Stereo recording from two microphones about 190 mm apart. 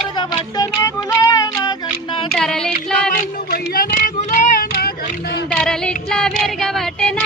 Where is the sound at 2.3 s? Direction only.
5° left (ahead or behind).